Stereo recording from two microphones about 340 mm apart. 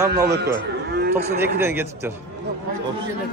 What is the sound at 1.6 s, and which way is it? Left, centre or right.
Speech, centre.